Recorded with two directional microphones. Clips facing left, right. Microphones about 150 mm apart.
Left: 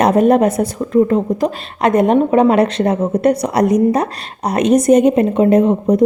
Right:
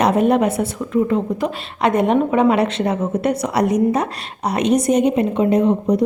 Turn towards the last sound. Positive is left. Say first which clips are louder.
# left 4 dB
turn(degrees=50)  # may be behind; listen again after turning